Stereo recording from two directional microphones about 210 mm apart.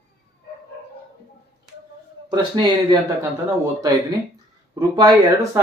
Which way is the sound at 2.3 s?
20° right (ahead or behind).